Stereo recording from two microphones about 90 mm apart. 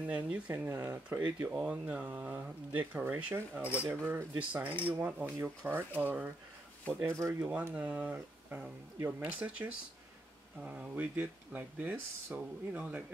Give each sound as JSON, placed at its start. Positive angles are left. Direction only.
{"t": 0.0, "sound": "speech", "side_deg": -15}
{"t": 1.5, "sound": "speech", "side_deg": -10}
{"t": 7.3, "sound": "speech", "side_deg": -20}